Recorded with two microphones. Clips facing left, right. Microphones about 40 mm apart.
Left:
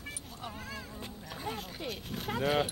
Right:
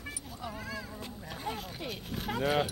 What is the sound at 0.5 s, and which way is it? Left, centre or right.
Cat, right.